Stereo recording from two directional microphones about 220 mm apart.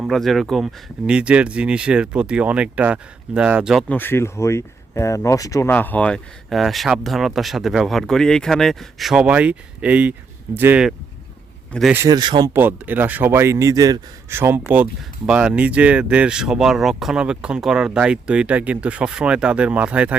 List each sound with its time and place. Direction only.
0.0 s speech: centre (ahead or behind)
11.9 s speech: 15° right (ahead or behind)
12.5 s speech: 10° right (ahead or behind)